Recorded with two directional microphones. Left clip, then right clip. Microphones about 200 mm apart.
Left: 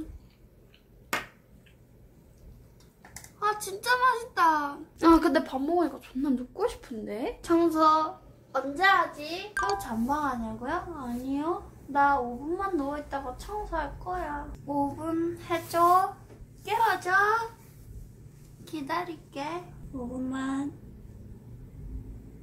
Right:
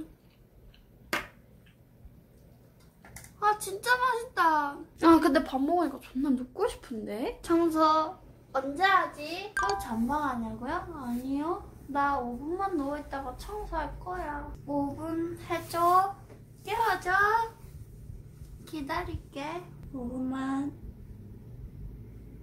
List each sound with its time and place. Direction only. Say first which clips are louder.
3.3 s speech: right 2 dB; 10° left (ahead or behind)
4.9 s a woman's voice: left 1 dB; 10° right (ahead or behind)
9.8 s a woman's voice: left 1 dB; 10° left (ahead or behind)
18.6 s a child's voice: left 2 dB; 10° left (ahead or behind)